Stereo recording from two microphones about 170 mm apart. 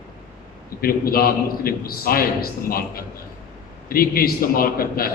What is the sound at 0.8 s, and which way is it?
A man's voice, 60° left (ahead or behind).